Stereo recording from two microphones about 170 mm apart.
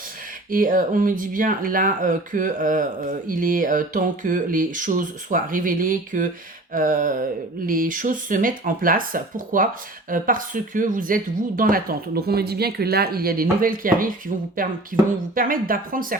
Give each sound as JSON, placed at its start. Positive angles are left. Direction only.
{"t": 0.5, "sound": "speech", "side_deg": -55}